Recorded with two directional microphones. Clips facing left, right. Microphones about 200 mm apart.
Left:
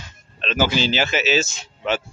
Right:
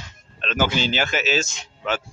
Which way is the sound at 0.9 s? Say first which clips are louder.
Left 2 dB; 5° left (ahead or behind).